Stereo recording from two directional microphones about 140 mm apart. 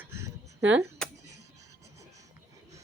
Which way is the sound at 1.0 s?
5° left (ahead or behind).